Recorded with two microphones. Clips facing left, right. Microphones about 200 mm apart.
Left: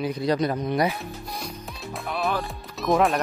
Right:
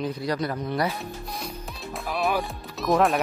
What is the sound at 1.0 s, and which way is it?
Music, centre (ahead or behind).